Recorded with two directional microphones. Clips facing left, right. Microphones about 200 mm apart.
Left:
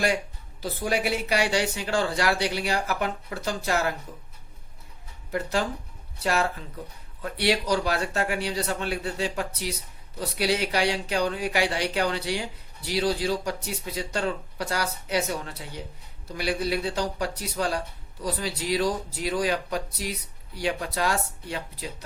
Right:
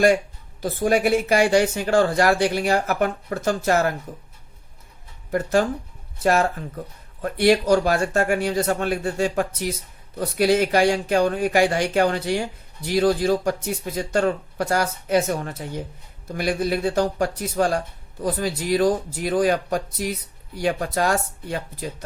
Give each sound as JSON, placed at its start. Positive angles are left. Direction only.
{"t": 0.6, "sound": "speech", "side_deg": -50}
{"t": 5.3, "sound": "speech", "side_deg": -50}